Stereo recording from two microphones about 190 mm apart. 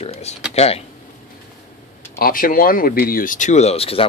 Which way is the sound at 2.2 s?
50° left (ahead or behind).